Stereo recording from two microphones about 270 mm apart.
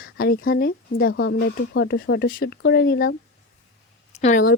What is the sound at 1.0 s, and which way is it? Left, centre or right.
Speech, left.